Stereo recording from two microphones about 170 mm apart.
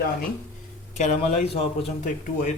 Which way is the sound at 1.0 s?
45° left (ahead or behind).